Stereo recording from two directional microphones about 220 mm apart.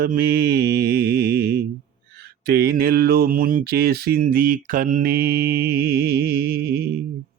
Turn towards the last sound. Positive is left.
turn(degrees=-45)  # may be behind; listen again after turning